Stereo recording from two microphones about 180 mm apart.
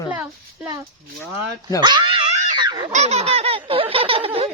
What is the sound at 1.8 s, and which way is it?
Speech, 25° right (ahead or behind).